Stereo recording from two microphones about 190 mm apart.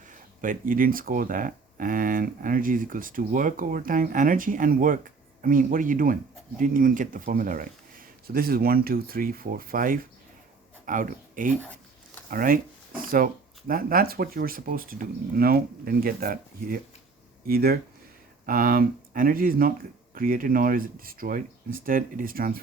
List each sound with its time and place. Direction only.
0.0 s speech: 45° right (ahead or behind)